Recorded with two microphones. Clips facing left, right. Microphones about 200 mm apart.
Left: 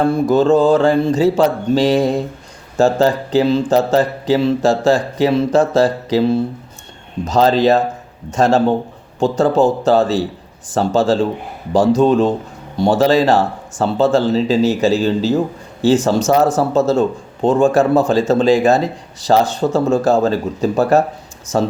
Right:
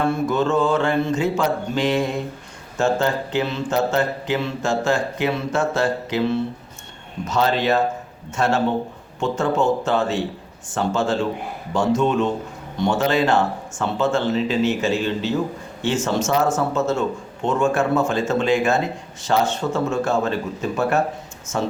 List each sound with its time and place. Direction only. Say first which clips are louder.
0.0 s speech: left 7 dB; 35° left (ahead or behind)